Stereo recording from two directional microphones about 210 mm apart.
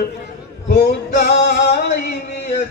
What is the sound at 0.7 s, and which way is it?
Male singing, 45° left (ahead or behind).